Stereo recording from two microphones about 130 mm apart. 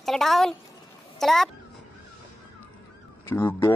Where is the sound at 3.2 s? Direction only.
20° left (ahead or behind).